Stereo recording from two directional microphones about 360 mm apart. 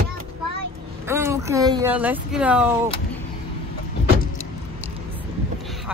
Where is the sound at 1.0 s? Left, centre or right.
Centre.